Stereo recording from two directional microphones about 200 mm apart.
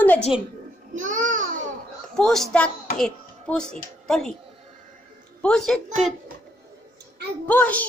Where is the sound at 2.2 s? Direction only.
Centre (ahead or behind).